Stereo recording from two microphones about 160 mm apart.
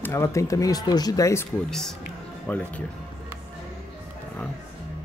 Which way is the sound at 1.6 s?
Centre (ahead or behind).